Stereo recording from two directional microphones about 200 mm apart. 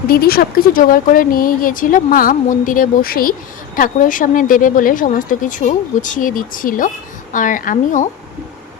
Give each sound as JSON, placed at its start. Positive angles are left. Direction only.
{"t": 0.1, "sound": "a woman's voice", "side_deg": 50}